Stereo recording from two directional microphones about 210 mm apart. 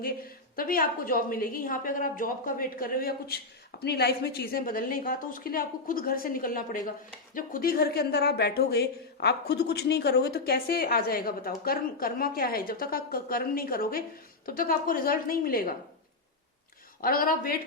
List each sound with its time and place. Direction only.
0.0 s a woman's voice: 45° left (ahead or behind)
17.0 s a woman's voice: 45° left (ahead or behind)